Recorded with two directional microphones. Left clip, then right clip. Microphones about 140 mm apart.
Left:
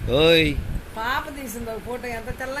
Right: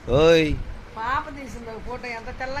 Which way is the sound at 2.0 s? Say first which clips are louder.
Left 1 dB; 55° left (ahead or behind).